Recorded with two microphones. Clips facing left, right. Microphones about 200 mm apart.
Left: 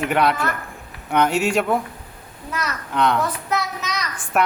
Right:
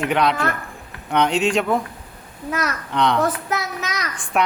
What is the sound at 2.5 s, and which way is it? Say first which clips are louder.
Speech: right 4 dB; 50° right (ahead or behind).